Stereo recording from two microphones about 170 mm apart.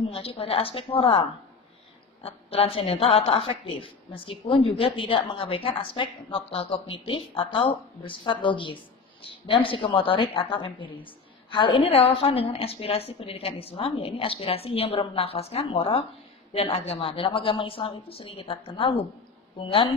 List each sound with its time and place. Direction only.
0.1 s a woman's voice: 35° left (ahead or behind)
2.2 s a woman's voice: 35° left (ahead or behind)